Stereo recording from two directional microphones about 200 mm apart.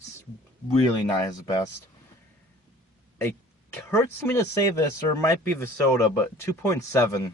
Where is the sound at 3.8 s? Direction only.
10° left (ahead or behind).